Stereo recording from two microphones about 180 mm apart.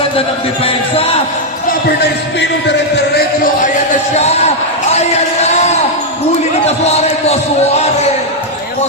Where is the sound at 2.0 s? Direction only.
75° left (ahead or behind); by 7.9 s 35° left (ahead or behind).